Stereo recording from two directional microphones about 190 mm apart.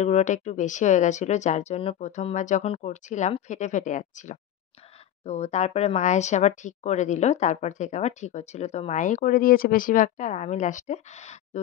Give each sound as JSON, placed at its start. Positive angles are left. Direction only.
{"t": 0.0, "sound": "speech", "side_deg": 35}